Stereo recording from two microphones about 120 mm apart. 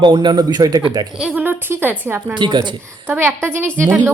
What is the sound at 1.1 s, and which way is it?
A woman's voice, 10° right (ahead or behind).